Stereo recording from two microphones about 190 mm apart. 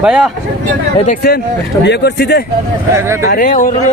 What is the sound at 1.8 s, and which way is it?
Speech, 60° left (ahead or behind).